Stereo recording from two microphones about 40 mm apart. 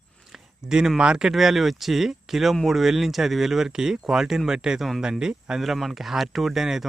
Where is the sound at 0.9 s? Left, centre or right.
Right.